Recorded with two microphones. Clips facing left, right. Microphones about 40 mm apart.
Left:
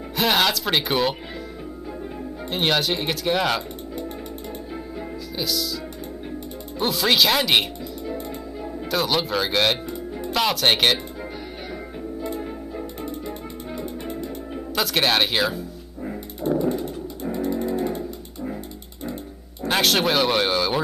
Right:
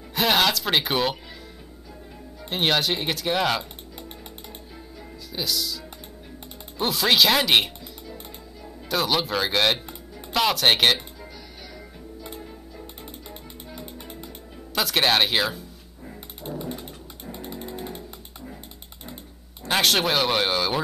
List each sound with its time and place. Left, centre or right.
0.1 s speech: centre
2.5 s speech: centre
5.3 s speech: centre
6.8 s speech: centre
8.9 s speech: centre
14.8 s speech: centre
16.4 s dog: centre
17.2 s music: centre
17.7 s a sound: centre
19.6 s speech: centre